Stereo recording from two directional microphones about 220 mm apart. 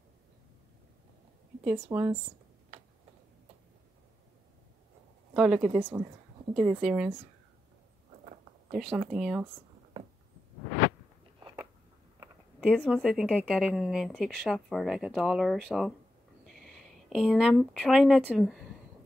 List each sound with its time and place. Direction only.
1.9 s a woman's voice: 10° right (ahead or behind)
5.3 s a woman's voice: centre (ahead or behind)
8.7 s a woman's voice: 5° right (ahead or behind)
11.3 s a sound: 15° right (ahead or behind)
12.5 s a woman's voice: centre (ahead or behind)